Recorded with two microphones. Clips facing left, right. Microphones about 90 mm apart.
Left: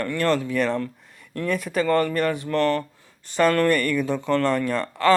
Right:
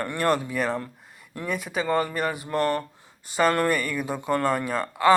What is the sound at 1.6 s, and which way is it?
Speech, 5° right (ahead or behind).